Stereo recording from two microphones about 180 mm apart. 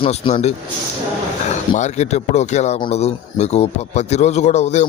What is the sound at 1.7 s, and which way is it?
A man's voice, 40° left (ahead or behind).